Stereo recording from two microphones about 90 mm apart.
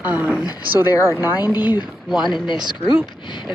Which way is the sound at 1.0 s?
25° right (ahead or behind).